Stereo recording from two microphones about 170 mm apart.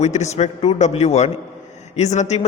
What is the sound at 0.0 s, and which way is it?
A man's voice, 40° left (ahead or behind).